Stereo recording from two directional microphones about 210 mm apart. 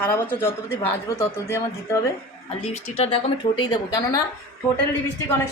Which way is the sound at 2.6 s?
30° left (ahead or behind).